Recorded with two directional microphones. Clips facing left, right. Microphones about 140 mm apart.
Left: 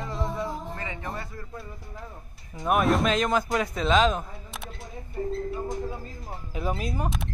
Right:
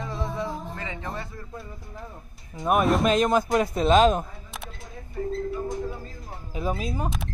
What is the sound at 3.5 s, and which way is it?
Speech, 40° right (ahead or behind).